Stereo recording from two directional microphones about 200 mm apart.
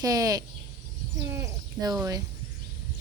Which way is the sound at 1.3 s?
15° right (ahead or behind).